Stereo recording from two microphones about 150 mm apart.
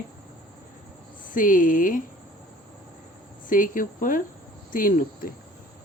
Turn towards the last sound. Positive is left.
turn(degrees=70)  # may be behind; listen again after turning